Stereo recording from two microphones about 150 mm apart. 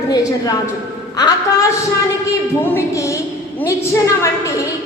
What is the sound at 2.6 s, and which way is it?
A woman's voice, 15° left (ahead or behind).